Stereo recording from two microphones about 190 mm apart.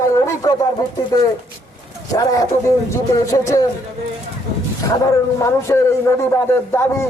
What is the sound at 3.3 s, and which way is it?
Speech, 20° left (ahead or behind).